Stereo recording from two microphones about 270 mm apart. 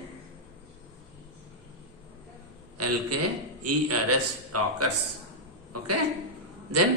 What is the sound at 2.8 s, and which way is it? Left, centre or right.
A man's voice, right.